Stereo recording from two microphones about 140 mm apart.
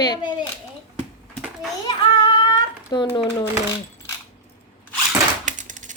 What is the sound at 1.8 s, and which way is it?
Child singing, 30° left (ahead or behind).